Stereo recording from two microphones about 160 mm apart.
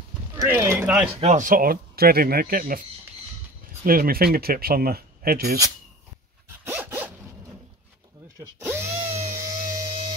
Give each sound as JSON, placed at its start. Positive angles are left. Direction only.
{"t": 0.4, "sound": "speech", "side_deg": -15}
{"t": 1.2, "sound": "speech", "side_deg": -50}
{"t": 3.8, "sound": "speech", "side_deg": -65}
{"t": 6.6, "sound": "dog", "side_deg": -15}
{"t": 8.4, "sound": "drill", "side_deg": -15}
{"t": 9.4, "sound": "a sound", "side_deg": -20}